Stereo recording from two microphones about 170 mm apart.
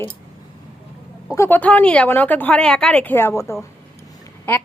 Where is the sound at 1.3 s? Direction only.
15° left (ahead or behind).